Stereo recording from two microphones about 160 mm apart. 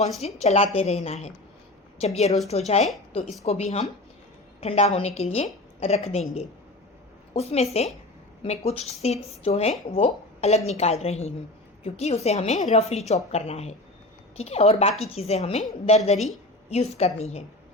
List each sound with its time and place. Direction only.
0.3 s a woman's voice: 40° left (ahead or behind)